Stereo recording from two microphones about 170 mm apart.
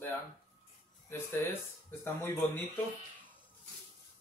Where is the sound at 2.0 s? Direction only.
15° left (ahead or behind).